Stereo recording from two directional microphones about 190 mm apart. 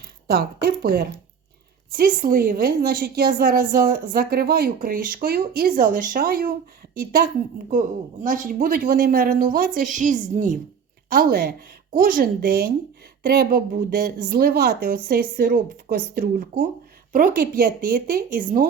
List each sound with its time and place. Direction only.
0.3 s a woman's voice: 55° right (ahead or behind); by 10.6 s 40° right (ahead or behind)
11.1 s a woman's voice: 50° right (ahead or behind)